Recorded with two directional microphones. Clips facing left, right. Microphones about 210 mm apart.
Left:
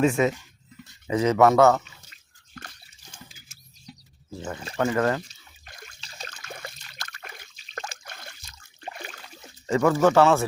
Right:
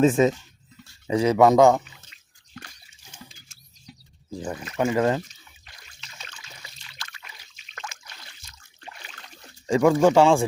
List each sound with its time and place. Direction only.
0.1 s speech: 20° right (ahead or behind)
3.2 s bird: 5° left (ahead or behind)
3.8 s music: 15° right (ahead or behind)
4.5 s speech: 30° left (ahead or behind)
4.8 s speech: 15° right (ahead or behind)
5.6 s water: 50° left (ahead or behind)
6.0 s water: 35° left (ahead or behind)
6.4 s a sound: 55° left (ahead or behind)
7.5 s trickle: 35° left (ahead or behind)
8.0 s a sound: 50° left (ahead or behind)
9.2 s a sound: 5° left (ahead or behind)
9.6 s speech: 15° right (ahead or behind)